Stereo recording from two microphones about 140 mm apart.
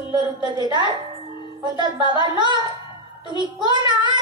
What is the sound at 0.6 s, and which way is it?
A child's voice, 30° right (ahead or behind).